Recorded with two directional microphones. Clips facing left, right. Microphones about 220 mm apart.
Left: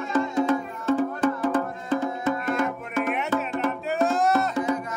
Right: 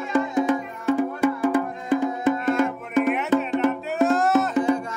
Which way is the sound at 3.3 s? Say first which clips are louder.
Right 6 dB; 15° right (ahead or behind).